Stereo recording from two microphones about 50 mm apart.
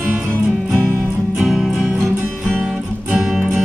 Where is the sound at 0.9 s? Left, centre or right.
Right.